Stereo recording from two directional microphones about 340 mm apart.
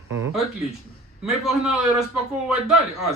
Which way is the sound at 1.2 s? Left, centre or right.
Centre.